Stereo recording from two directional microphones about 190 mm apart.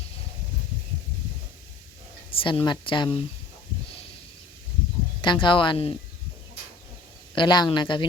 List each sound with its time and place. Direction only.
2.3 s speech: 30° left (ahead or behind)
5.2 s speech: 25° left (ahead or behind)
7.3 s speech: 20° left (ahead or behind)